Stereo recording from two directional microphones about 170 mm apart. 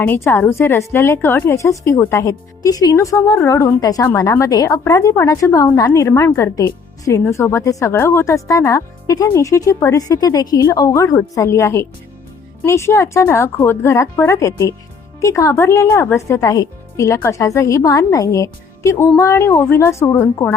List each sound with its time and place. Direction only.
0.0 s a woman's voice: 10° left (ahead or behind)